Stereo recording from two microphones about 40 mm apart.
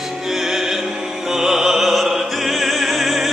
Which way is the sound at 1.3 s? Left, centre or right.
Centre.